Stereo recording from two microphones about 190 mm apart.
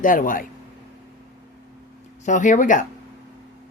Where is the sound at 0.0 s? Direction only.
45° left (ahead or behind).